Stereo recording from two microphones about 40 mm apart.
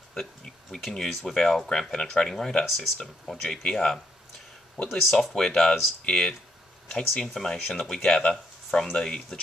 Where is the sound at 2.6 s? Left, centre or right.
Centre.